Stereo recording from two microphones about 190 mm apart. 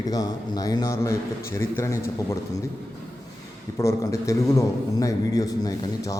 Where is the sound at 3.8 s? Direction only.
15° left (ahead or behind).